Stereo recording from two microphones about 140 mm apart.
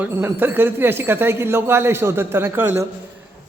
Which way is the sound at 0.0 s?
15° right (ahead or behind).